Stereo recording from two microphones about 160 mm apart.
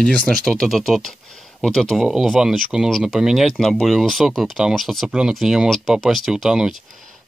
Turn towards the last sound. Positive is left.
turn(degrees=-5)  # may be behind; listen again after turning